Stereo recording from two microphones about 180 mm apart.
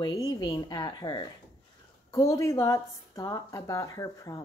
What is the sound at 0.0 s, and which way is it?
A woman's voice, 20° left (ahead or behind).